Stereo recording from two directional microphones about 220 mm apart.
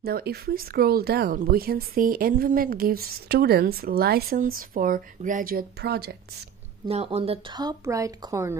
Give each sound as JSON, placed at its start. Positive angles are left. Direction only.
{"t": 0.0, "sound": "speech", "side_deg": -45}
{"t": 6.9, "sound": "speech", "side_deg": -30}